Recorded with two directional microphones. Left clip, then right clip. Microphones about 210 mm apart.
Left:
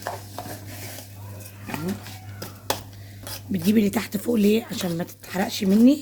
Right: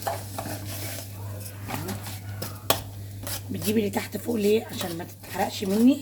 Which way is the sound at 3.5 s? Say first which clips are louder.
Left 3 dB; 50° left (ahead or behind).